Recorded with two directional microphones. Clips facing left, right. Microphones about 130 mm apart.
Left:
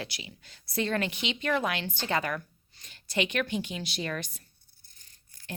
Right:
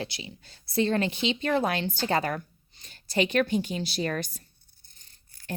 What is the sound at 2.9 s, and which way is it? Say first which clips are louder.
A woman's voice: right 4 dB; 40° right (ahead or behind).